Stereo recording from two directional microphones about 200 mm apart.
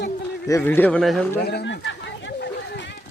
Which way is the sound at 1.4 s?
55° left (ahead or behind).